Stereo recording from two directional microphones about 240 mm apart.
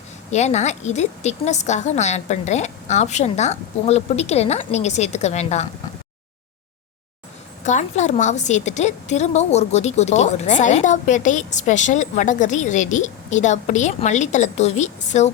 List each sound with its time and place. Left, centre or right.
0.3 s a woman's voice: left
7.6 s a woman's voice: left